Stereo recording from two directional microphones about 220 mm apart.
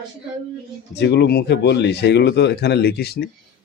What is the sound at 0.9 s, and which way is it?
Speech, 50° left (ahead or behind).